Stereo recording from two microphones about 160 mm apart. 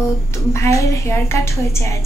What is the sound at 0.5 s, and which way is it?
A woman's voice, 20° left (ahead or behind).